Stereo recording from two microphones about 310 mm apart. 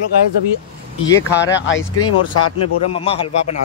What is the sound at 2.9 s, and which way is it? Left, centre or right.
Speech, centre.